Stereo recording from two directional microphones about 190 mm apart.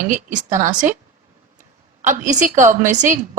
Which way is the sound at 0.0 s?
40° right (ahead or behind).